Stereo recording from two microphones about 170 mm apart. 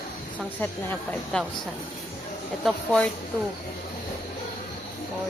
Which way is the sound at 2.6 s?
5° left (ahead or behind).